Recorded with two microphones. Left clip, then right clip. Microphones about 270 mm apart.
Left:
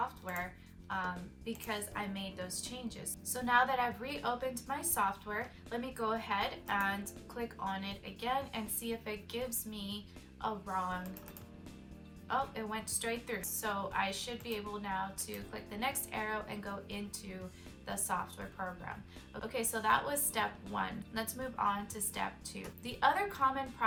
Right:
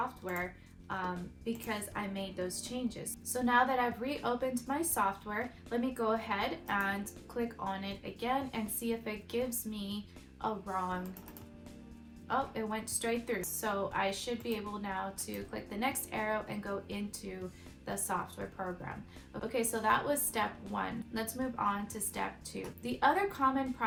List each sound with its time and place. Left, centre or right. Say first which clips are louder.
0.2 s music: right 2 dB; centre
0.9 s a woman's voice: even; centre
12.3 s a woman's voice: right 2 dB; centre
19.3 s a woman's voice: right 3 dB; centre